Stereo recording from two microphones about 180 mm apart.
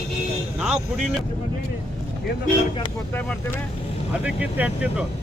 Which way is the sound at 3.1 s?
10° left (ahead or behind).